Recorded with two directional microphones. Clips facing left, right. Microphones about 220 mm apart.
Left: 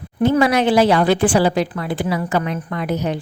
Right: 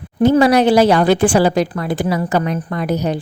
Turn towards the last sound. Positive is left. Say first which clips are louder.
# right 3 dB
turn(degrees=-40)  # may be behind; listen again after turning